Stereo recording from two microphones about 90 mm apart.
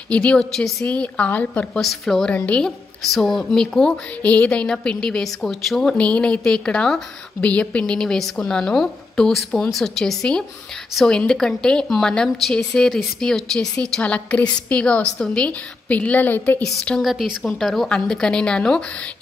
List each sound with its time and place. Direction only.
0.1 s a woman's voice: 15° left (ahead or behind)
0.8 s a woman's voice: 15° left (ahead or behind)
1.8 s a woman's voice: centre (ahead or behind)
2.3 s a woman's voice: 15° left (ahead or behind)
3.0 s a woman's voice: 5° left (ahead or behind); by 16.6 s 20° left (ahead or behind)
16.6 s a woman's voice: 10° left (ahead or behind)
17.0 s a woman's voice: centre (ahead or behind)